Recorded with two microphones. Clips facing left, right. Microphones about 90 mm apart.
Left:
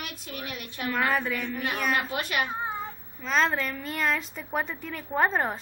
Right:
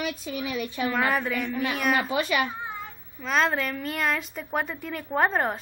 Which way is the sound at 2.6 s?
30° left (ahead or behind).